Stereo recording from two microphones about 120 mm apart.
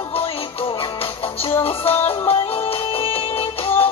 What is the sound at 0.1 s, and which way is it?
Music, 50° left (ahead or behind).